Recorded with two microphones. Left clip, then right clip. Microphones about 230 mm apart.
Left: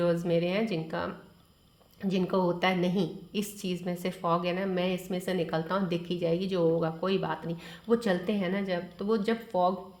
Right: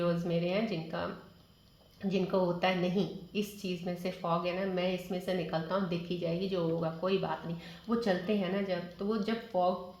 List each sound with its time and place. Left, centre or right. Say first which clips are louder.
0.0 s a woman's voice: left 5 dB; left